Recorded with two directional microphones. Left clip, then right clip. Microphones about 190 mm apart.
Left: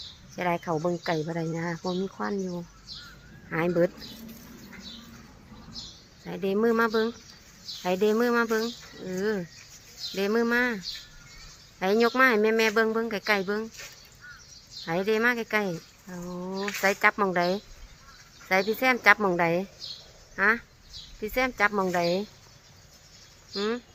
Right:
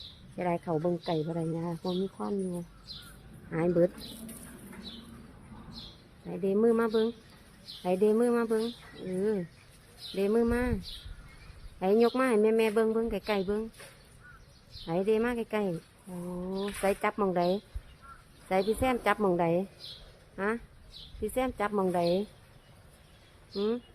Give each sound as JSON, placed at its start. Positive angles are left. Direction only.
{"t": 0.3, "sound": "speech", "side_deg": 0}
{"t": 0.7, "sound": "speech", "side_deg": 15}
{"t": 1.0, "sound": "speech", "side_deg": 0}
{"t": 1.8, "sound": "speech", "side_deg": 25}
{"t": 3.5, "sound": "speech", "side_deg": 0}
{"t": 6.2, "sound": "speech", "side_deg": 0}
{"t": 11.8, "sound": "speech", "side_deg": 0}
{"t": 14.8, "sound": "speech", "side_deg": 0}
{"t": 16.3, "sound": "speech", "side_deg": 10}
{"t": 16.8, "sound": "speech", "side_deg": 0}
{"t": 23.6, "sound": "speech", "side_deg": -5}